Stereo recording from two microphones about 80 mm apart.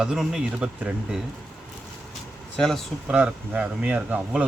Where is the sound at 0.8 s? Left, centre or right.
Centre.